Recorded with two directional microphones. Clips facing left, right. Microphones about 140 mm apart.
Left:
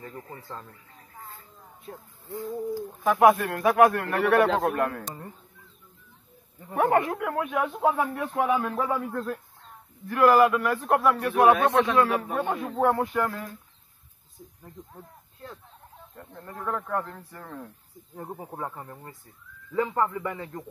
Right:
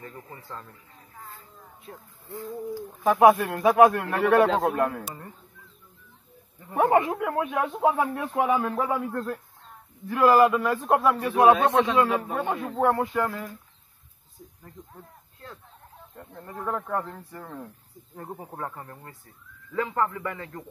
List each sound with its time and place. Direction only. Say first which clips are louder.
1.9 s speech: left 3 dB; 20° left (ahead or behind)
3.0 s speech: right 2 dB; 10° right (ahead or behind)
3.8 s a man's voice: right 1 dB; 15° right (ahead or behind)
6.7 s a man's voice: right 2 dB; 5° right (ahead or behind)
7.0 s a man's voice: right 2 dB; 20° right (ahead or behind)
7.9 s a man's voice: right 1 dB; 20° right (ahead or behind)
8.3 s a man's voice: right 1 dB; 5° right (ahead or behind)
13.1 s a man's voice: even; 15° right (ahead or behind)
14.6 s a sound: left 1 dB; 15° left (ahead or behind)
16.3 s speech: even; 5° right (ahead or behind)
16.5 s a man's voice: right 1 dB; 15° right (ahead or behind)
18.3 s speech: even; 10° left (ahead or behind)